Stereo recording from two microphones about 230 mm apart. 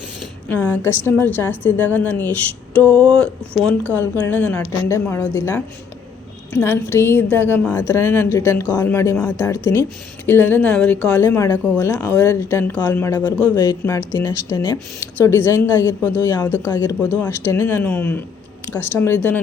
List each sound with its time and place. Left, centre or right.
0.4 s a woman's voice: centre